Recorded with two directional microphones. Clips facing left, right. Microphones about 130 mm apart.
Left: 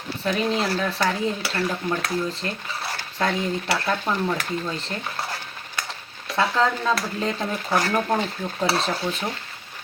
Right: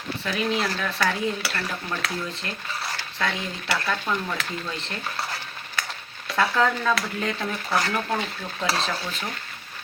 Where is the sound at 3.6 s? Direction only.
25° left (ahead or behind).